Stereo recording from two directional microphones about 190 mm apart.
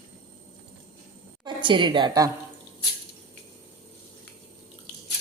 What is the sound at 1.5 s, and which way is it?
Speech, 25° right (ahead or behind).